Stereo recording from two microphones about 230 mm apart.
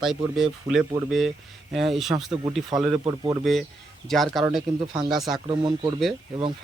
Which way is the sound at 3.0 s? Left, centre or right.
Centre.